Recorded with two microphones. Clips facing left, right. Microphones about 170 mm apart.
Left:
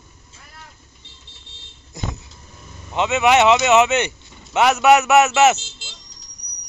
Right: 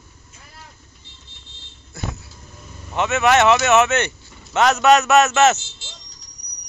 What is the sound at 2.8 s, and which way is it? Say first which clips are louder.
Speech: left 1 dB; 15° left (ahead or behind).